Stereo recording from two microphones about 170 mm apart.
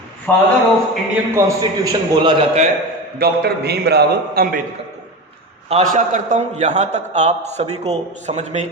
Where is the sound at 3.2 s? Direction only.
70° right (ahead or behind).